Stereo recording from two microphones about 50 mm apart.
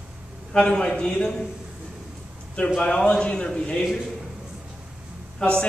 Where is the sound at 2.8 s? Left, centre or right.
Centre.